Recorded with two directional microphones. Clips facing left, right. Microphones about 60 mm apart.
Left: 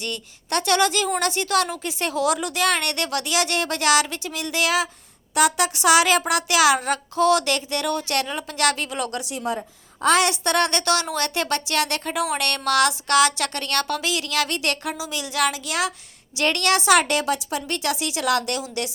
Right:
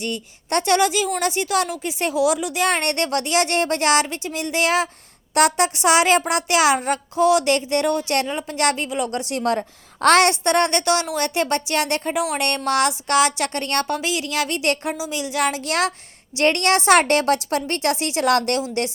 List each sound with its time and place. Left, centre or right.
0.0 s speech: right
2.1 s a woman's voice: centre
2.6 s a woman's voice: right
5.3 s a woman's voice: right
5.5 s speech: right
6.7 s speech: centre
9.2 s a woman's voice: right
10.4 s speech: right
12.4 s speech: right
15.6 s a woman's voice: right
16.3 s a woman's voice: right
17.7 s a woman's voice: right